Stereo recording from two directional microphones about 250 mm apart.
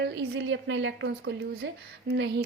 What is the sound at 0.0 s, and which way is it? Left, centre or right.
Speech, right.